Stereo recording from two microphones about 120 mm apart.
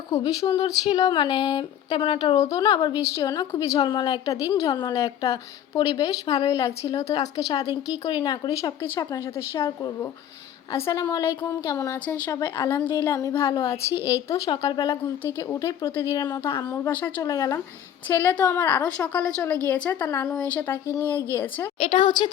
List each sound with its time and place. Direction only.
0.1 s a woman's voice: 30° left (ahead or behind)
3.8 s a woman's voice: 40° left (ahead or behind)
14.5 s a woman's voice: 35° left (ahead or behind)
16.1 s speech: 35° left (ahead or behind)
16.6 s a woman's voice: 20° left (ahead or behind)
17.2 s a woman's voice: 30° left (ahead or behind)
19.0 s a woman's voice: 10° left (ahead or behind)
20.1 s a woman's voice: 25° left (ahead or behind)
20.5 s a woman's voice: 10° left (ahead or behind)
21.8 s speech: 40° left (ahead or behind)